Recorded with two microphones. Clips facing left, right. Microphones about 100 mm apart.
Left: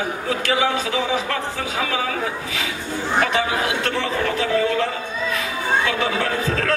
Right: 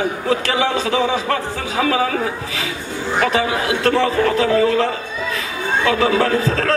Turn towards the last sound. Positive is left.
turn(degrees=-40)  # may be behind; listen again after turning